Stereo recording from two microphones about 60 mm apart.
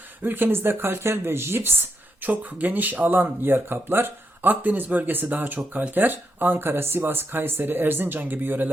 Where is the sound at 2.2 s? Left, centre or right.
Right.